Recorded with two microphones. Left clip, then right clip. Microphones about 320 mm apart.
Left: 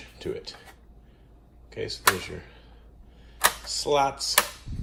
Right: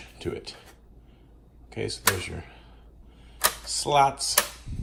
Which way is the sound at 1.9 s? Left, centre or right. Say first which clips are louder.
Left 3 dB; centre.